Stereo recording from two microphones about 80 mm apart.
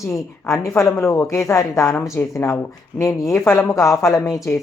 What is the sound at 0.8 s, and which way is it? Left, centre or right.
Speech, left.